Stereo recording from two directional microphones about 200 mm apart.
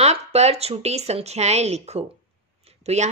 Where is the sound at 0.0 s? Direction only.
30° right (ahead or behind).